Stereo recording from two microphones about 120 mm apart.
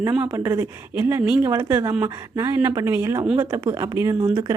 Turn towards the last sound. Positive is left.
turn(degrees=-30)  # may be behind; listen again after turning